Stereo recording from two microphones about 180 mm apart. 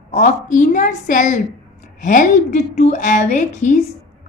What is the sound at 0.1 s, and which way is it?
A woman's voice, 45° left (ahead or behind).